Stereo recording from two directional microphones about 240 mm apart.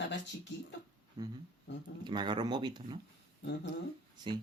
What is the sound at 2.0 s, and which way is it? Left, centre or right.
Speech, centre.